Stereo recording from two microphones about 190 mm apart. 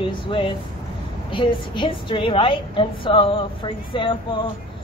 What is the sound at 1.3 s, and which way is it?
A man's voice, 25° left (ahead or behind).